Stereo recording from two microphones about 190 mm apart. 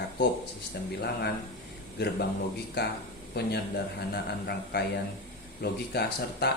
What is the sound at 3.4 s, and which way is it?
Speech, 60° left (ahead or behind).